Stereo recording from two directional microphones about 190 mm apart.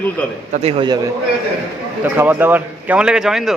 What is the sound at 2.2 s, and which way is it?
A man's voice, 10° right (ahead or behind).